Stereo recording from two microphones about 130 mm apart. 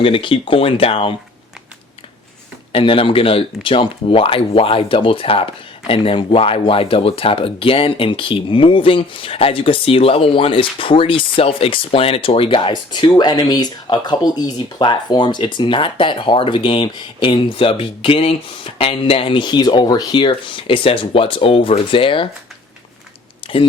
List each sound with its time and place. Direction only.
0.0 s speech: 40° left (ahead or behind)
2.7 s speech: 45° left (ahead or behind)
23.4 s a sound: 45° left (ahead or behind)